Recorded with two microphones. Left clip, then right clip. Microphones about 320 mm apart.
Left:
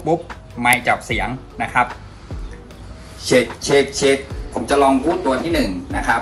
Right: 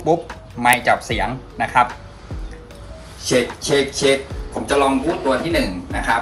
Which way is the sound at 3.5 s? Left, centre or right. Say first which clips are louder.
Left 3 dB; centre.